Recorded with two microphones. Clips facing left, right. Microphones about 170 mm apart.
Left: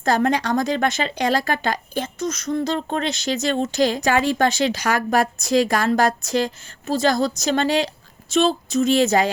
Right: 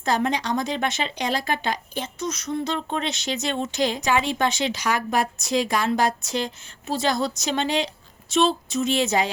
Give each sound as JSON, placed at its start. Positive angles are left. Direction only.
{"t": 0.0, "sound": "a woman's voice", "side_deg": 50}
{"t": 2.1, "sound": "a sound", "side_deg": 90}
{"t": 2.5, "sound": "a woman's voice", "side_deg": 40}